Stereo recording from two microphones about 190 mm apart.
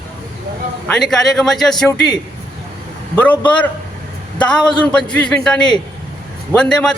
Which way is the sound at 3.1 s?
10° left (ahead or behind).